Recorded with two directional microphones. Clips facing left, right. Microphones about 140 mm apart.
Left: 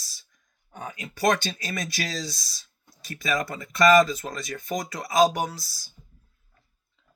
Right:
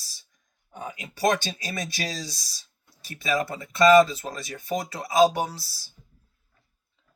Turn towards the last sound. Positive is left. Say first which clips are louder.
# even
turn(degrees=-30)  # may be behind; listen again after turning